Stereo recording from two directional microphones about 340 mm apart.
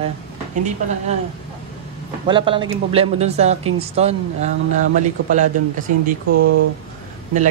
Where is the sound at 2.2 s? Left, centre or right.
Centre.